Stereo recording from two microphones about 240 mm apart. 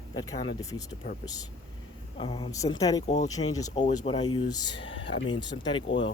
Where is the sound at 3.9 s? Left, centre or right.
Left.